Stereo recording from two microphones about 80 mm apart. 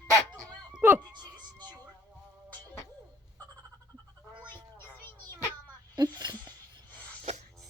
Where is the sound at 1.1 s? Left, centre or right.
Right.